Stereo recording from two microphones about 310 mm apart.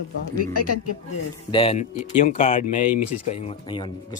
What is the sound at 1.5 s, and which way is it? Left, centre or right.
Speech, centre.